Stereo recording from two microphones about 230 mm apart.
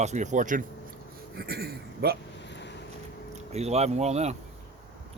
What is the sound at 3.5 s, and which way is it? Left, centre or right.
Speech, right.